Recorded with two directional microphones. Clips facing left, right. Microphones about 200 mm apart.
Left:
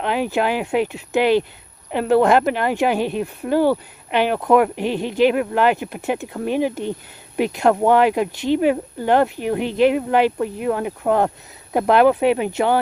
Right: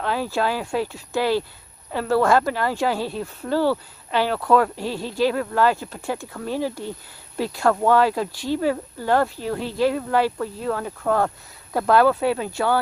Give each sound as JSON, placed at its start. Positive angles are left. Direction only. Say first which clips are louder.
{"t": 0.0, "sound": "speech", "louder": "left 3 dB", "side_deg": 20}